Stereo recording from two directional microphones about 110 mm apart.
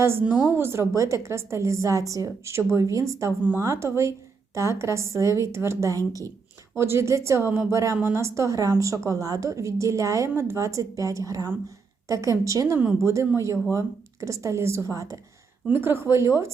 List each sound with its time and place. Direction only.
0.0 s a woman's voice: 20° right (ahead or behind)
15.6 s a woman's voice: 20° right (ahead or behind)